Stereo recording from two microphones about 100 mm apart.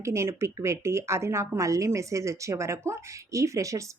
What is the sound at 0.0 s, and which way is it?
Speech, 30° right (ahead or behind).